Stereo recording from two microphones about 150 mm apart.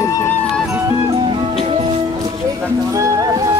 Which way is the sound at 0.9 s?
35° right (ahead or behind).